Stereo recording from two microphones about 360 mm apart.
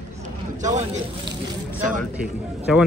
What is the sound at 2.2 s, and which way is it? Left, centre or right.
Speech, centre.